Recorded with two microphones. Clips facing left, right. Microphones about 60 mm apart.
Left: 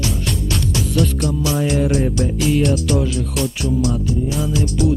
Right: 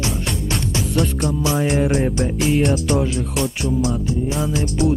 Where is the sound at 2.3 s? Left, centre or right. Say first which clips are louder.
Left 1 dB; right.